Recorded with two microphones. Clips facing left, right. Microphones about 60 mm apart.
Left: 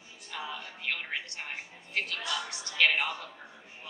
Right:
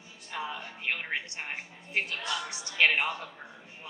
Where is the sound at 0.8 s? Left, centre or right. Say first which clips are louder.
Right 2 dB; right.